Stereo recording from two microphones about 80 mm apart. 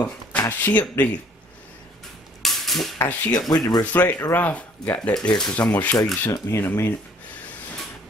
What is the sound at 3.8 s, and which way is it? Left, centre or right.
Speech, left.